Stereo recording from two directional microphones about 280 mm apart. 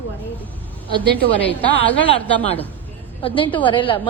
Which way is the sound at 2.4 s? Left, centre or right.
Left.